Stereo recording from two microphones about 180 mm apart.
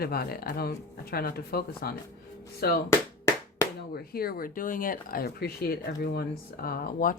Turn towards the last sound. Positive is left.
turn(degrees=55)  # may be behind; listen again after turning